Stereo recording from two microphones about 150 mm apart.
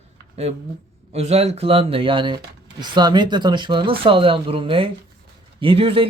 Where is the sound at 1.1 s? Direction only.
45° right (ahead or behind).